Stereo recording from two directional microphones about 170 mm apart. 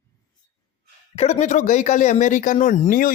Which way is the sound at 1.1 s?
40° left (ahead or behind).